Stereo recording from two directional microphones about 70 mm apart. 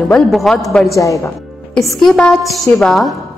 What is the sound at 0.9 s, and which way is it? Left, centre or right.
Speech, left.